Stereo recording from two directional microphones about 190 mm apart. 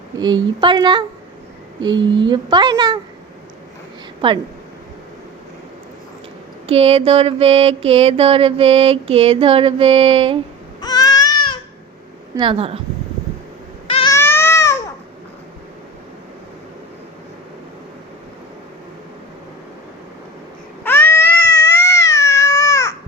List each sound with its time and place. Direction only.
0.2 s speech: 25° right (ahead or behind)
6.7 s mantra: 30° right (ahead or behind)
10.8 s baby cry: 20° left (ahead or behind)
12.4 s mantra: 30° right (ahead or behind)
14.1 s a sound: 15° left (ahead or behind)
20.8 s cat: 10° left (ahead or behind)